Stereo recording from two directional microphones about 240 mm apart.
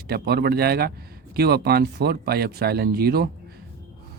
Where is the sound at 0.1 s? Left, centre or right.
Right.